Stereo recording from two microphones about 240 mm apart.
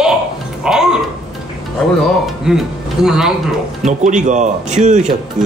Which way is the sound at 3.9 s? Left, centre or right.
Right.